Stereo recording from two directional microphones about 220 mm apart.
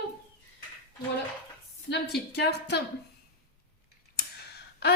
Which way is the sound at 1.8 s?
50° left (ahead or behind).